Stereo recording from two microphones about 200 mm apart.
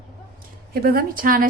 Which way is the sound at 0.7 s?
50° right (ahead or behind).